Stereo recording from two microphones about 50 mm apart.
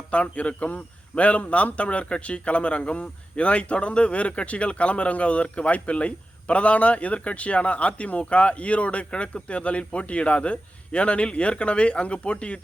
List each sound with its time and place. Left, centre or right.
0.1 s speech: left